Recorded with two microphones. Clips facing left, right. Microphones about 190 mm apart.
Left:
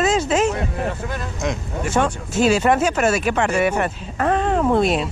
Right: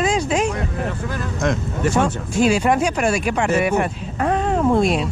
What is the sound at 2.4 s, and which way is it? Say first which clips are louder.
Speech: even; 5° right (ahead or behind).